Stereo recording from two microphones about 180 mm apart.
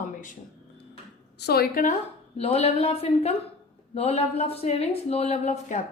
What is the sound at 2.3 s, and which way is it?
A woman's voice, 35° left (ahead or behind).